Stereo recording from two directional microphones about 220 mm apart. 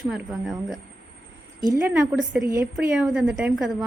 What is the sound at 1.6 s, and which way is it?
A woman's voice, 10° right (ahead or behind).